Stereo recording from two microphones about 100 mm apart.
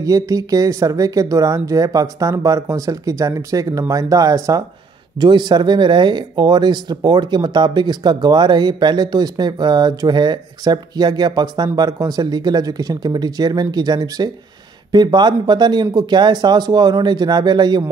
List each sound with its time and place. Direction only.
0.0 s speech: 35° right (ahead or behind)